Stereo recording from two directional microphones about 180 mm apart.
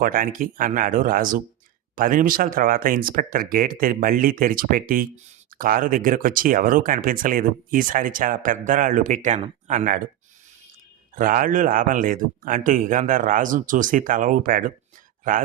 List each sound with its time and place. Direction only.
0.0 s speech: 50° right (ahead or behind)
11.1 s speech: 50° right (ahead or behind)